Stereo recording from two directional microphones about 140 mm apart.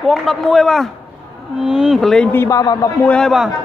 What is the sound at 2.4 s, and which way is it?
Speech, 25° left (ahead or behind).